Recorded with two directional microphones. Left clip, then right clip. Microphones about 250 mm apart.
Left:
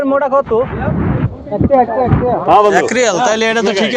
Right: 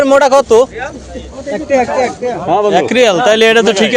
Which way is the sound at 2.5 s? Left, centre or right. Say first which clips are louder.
Left 1 dB; right.